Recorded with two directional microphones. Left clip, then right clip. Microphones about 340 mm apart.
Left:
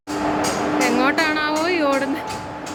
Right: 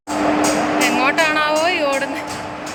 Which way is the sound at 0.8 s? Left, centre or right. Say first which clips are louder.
Right 1 dB; centre.